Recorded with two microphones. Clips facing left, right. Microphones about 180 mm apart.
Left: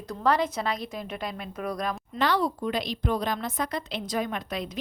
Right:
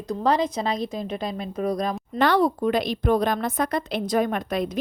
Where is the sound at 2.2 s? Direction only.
60° right (ahead or behind).